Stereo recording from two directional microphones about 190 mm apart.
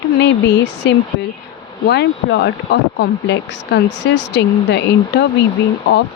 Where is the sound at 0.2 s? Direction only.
65° left (ahead or behind).